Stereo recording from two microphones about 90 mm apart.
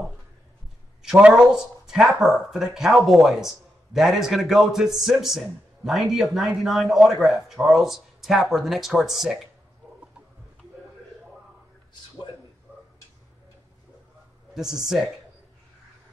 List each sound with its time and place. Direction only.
1.0 s speech: 5° right (ahead or behind)
9.8 s chicken: centre (ahead or behind)
12.7 s tick-tock: 20° right (ahead or behind)
14.5 s speech: 5° right (ahead or behind)